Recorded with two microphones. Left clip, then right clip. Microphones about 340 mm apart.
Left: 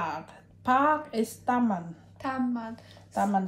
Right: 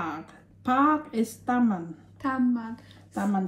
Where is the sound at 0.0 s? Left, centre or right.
Centre.